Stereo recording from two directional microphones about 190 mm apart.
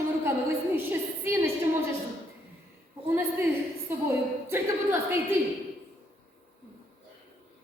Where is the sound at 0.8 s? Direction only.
10° right (ahead or behind).